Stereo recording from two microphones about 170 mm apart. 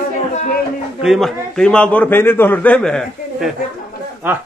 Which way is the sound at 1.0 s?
Centre (ahead or behind).